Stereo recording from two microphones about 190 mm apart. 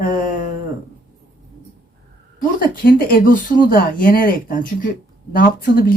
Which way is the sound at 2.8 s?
50° left (ahead or behind).